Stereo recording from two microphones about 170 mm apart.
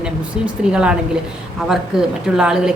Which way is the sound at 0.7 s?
5° right (ahead or behind).